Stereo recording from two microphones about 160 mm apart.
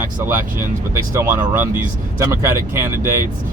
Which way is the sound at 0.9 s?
15° right (ahead or behind).